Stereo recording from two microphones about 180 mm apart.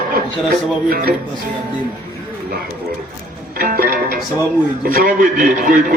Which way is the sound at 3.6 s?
55° right (ahead or behind).